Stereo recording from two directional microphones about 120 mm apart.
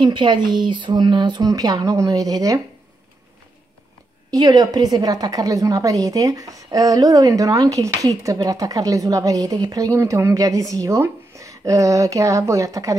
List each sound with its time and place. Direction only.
0.0 s speech: 40° right (ahead or behind)
4.3 s a woman's voice: 35° right (ahead or behind)